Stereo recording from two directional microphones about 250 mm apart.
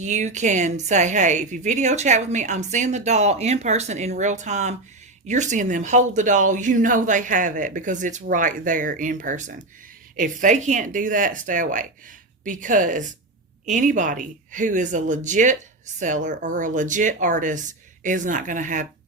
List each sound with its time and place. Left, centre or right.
0.0 s a woman's voice: right